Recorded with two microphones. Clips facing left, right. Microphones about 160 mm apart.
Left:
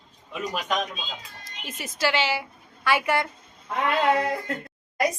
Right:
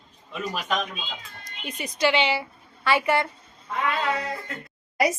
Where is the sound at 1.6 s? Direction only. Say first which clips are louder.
Right 3 dB; 5° left (ahead or behind).